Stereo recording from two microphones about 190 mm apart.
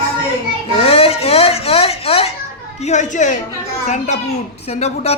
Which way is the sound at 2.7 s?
35° left (ahead or behind).